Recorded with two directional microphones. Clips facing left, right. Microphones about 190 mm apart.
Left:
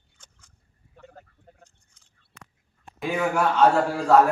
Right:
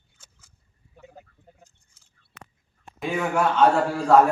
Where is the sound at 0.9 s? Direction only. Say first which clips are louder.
Right 1 dB; 10° right (ahead or behind).